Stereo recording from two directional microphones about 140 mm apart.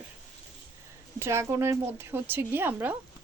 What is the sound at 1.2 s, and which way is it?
Speech, 20° right (ahead or behind).